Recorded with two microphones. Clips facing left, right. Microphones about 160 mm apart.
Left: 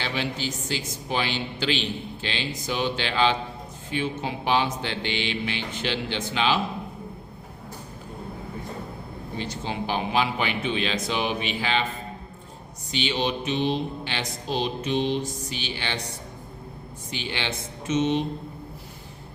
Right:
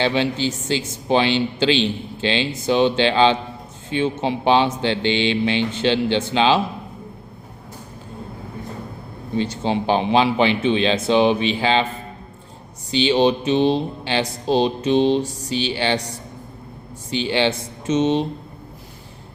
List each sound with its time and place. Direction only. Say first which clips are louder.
0.0 s speech: right 9 dB; 25° right (ahead or behind)
9.4 s speech: right 9 dB; 30° right (ahead or behind)
12.9 s speech: right 10 dB; 30° right (ahead or behind)
17.1 s speech: right 11 dB; 30° right (ahead or behind)